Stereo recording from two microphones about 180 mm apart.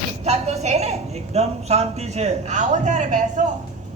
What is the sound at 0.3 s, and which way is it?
A man's voice, 35° right (ahead or behind).